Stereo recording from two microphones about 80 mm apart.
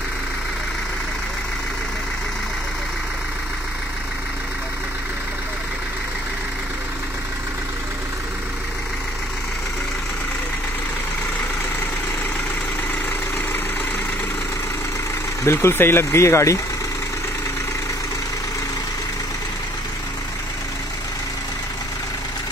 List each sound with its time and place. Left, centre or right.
15.4 s speech: left